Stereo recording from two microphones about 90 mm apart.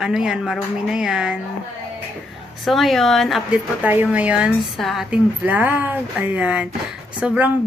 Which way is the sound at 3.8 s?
20° right (ahead or behind).